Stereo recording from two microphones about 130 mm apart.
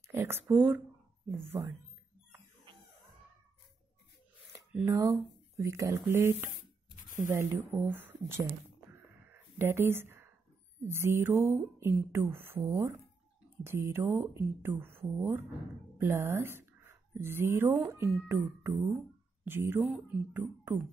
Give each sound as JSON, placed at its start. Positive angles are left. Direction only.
{"t": 0.1, "sound": "speech", "side_deg": -20}
{"t": 4.8, "sound": "speech", "side_deg": -25}
{"t": 7.2, "sound": "a sound", "side_deg": -15}
{"t": 10.8, "sound": "speech", "side_deg": -20}
{"t": 18.8, "sound": "speech", "side_deg": -5}
{"t": 19.4, "sound": "speech", "side_deg": -15}